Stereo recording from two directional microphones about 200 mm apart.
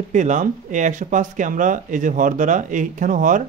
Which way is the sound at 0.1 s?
40° right (ahead or behind).